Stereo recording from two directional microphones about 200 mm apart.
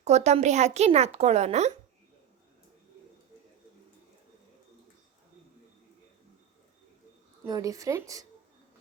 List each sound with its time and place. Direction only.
0.0 s a woman's voice: 35° right (ahead or behind)
7.4 s a woman's voice: 15° right (ahead or behind)